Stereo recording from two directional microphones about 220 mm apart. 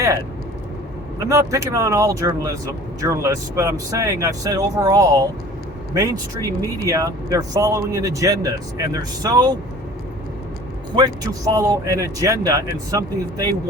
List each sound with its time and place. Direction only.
1.3 s a man's voice: 15° right (ahead or behind)
10.9 s speech: 15° right (ahead or behind)